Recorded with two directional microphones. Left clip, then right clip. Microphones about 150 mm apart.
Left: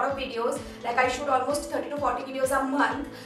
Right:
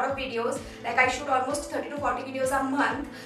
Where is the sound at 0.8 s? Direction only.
Centre (ahead or behind).